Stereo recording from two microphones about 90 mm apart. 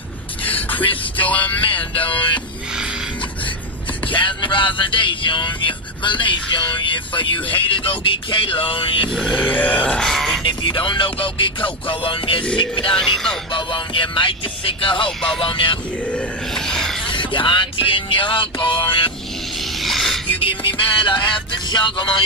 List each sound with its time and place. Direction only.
0.6 s music: 20° left (ahead or behind)
1.1 s grunt: 15° left (ahead or behind)
4.1 s speech: 65° left (ahead or behind)
9.3 s grunt: 15° left (ahead or behind)
10.4 s speech: 60° left (ahead or behind)
12.9 s speech: 5° left (ahead or behind)
13.5 s speech: 60° left (ahead or behind)
15.0 s grunt: 5° left (ahead or behind)
15.4 s speech: 65° left (ahead or behind)
16.1 s grunt: 5° left (ahead or behind)
17.1 s speech: 65° left (ahead or behind)
19.8 s a sound: centre (ahead or behind)
20.3 s speech: 70° left (ahead or behind)